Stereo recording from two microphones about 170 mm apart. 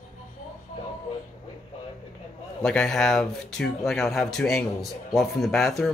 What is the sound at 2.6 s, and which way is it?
Speech, centre (ahead or behind).